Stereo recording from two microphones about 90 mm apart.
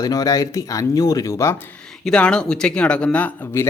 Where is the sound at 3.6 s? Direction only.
25° left (ahead or behind).